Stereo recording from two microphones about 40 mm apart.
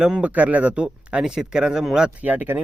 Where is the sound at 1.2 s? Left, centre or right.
Centre.